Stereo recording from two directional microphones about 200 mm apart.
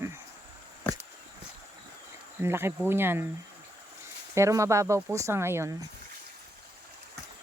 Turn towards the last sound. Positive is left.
turn(degrees=-15)  # may be behind; listen again after turning